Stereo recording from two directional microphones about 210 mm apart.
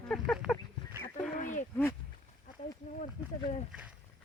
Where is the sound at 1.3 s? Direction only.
35° left (ahead or behind).